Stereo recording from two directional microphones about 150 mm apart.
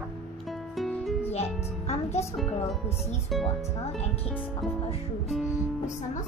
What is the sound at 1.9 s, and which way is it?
Speech, 45° left (ahead or behind).